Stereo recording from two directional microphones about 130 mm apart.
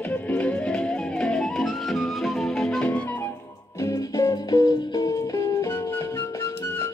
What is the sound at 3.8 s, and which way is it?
Music, 25° left (ahead or behind).